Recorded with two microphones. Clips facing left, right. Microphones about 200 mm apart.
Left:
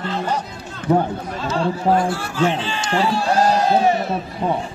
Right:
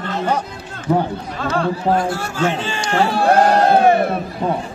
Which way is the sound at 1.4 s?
55° right (ahead or behind).